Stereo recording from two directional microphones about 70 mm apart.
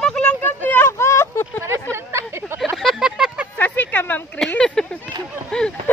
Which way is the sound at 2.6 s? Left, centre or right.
Centre.